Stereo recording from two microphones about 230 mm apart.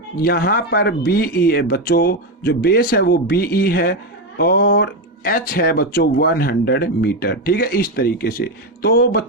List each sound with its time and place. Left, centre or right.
0.2 s speech: left